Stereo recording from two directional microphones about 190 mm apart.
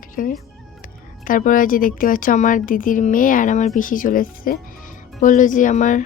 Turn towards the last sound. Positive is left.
turn(degrees=40)  # may be behind; listen again after turning